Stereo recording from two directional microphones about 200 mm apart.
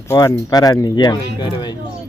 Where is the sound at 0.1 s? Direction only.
15° left (ahead or behind).